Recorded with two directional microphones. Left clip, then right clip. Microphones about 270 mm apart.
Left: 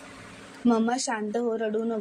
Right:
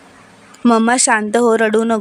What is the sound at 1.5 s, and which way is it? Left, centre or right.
Speech, right.